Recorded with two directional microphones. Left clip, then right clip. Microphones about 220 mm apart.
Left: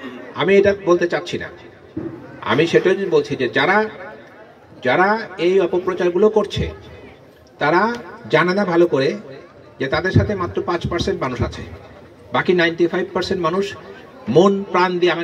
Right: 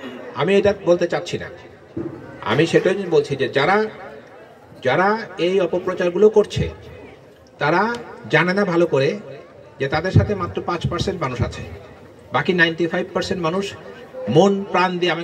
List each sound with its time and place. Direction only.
0.3 s a man's voice: 40° right (ahead or behind)